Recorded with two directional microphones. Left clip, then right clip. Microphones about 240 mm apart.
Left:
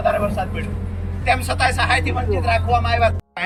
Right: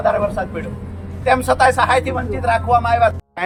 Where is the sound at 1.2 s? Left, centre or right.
Centre.